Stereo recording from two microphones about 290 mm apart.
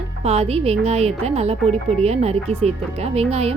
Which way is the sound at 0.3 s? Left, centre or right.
Right.